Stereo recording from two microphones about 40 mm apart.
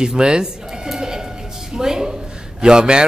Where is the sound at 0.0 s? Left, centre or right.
Centre.